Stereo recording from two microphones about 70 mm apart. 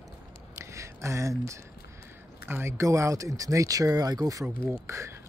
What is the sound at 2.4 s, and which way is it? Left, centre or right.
Speech, right.